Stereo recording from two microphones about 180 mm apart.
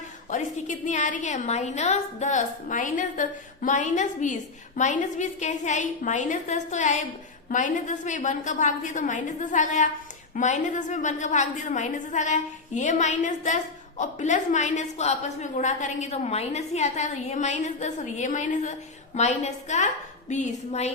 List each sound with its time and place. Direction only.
0.3 s a woman's voice: 40° left (ahead or behind)